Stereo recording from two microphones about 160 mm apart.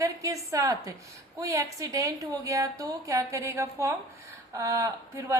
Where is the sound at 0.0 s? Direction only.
20° right (ahead or behind).